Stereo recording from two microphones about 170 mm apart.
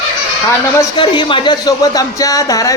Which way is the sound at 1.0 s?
25° left (ahead or behind).